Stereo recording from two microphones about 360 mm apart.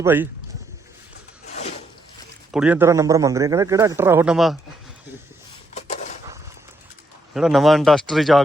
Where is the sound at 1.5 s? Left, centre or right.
Centre.